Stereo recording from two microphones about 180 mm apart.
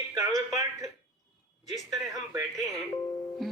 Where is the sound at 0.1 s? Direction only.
20° right (ahead or behind).